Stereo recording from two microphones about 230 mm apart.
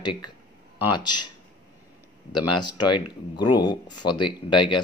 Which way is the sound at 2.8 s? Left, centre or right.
Centre.